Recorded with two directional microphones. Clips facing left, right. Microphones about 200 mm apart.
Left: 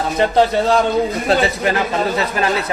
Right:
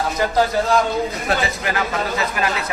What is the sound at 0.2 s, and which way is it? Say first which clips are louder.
Speech: left 5 dB; 25° left (ahead or behind).